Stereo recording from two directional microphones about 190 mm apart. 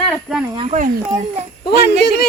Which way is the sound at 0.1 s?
Centre (ahead or behind).